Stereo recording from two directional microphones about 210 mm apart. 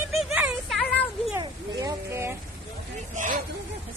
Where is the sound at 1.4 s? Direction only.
15° right (ahead or behind).